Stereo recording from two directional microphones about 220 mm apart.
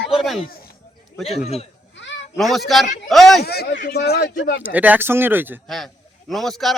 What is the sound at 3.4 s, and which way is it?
Speech, 45° left (ahead or behind).